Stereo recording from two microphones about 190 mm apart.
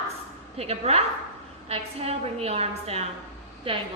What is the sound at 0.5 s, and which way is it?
A woman's voice, 35° right (ahead or behind).